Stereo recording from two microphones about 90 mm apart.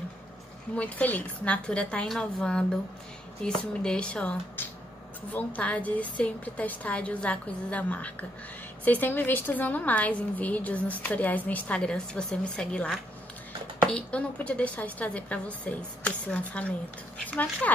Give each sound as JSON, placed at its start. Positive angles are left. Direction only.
{"t": 0.7, "sound": "a woman's voice", "side_deg": 15}